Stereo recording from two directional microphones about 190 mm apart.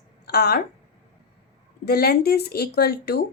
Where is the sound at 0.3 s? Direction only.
55° left (ahead or behind).